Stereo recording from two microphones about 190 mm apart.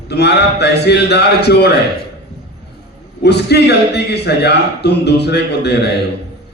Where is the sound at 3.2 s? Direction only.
60° left (ahead or behind).